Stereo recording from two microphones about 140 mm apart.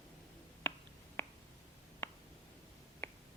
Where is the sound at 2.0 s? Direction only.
20° left (ahead or behind).